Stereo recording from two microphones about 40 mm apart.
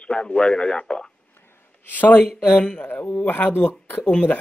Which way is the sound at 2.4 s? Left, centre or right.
Left.